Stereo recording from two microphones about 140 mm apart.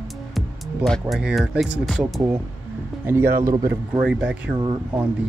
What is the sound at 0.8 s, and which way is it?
Speech, centre (ahead or behind).